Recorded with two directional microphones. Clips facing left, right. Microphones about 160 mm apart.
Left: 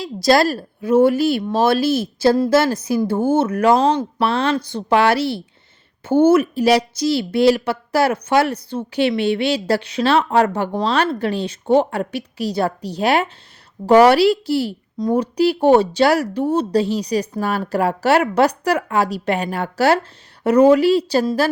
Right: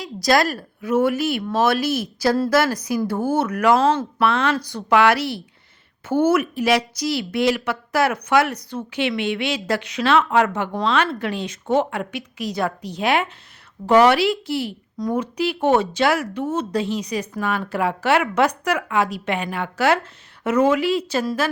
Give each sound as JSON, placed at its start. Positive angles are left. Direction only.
{"t": 0.0, "sound": "a woman's voice", "side_deg": 30}